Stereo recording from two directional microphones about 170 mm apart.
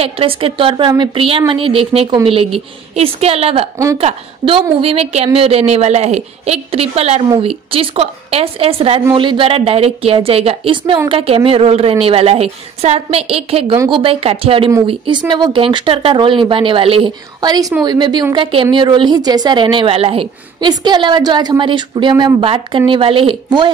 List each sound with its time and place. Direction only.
0.0 s a woman's voice: 35° right (ahead or behind)
3.7 s speech: 15° right (ahead or behind)
4.0 s a woman's voice: 35° right (ahead or behind)